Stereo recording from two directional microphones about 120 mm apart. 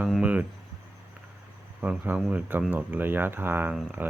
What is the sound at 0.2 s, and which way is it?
Speech, 10° right (ahead or behind).